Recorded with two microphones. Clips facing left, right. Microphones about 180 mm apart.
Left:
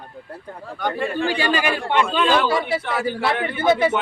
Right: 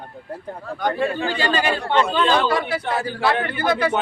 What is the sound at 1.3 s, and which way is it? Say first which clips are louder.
Speech: even; 15° left (ahead or behind).